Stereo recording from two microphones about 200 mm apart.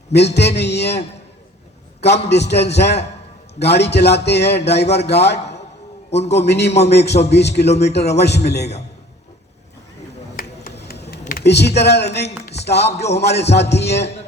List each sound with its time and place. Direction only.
0.1 s a man's voice: 55° left (ahead or behind)
10.3 s computer keyboard: 50° left (ahead or behind)
12.5 s music: 55° left (ahead or behind)
13.1 s a man's voice: 55° left (ahead or behind)